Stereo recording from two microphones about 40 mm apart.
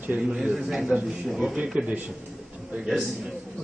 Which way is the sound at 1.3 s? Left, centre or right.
Centre.